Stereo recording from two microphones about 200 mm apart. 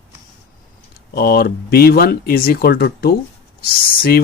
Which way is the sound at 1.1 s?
50° left (ahead or behind).